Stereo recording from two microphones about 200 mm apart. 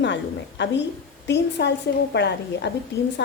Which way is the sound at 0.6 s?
60° left (ahead or behind).